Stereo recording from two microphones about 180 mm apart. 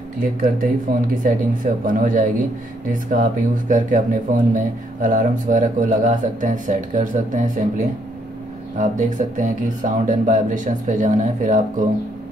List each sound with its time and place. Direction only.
0.2 s speech: 50° right (ahead or behind)